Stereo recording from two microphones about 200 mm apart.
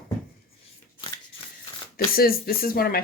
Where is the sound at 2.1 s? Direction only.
50° left (ahead or behind).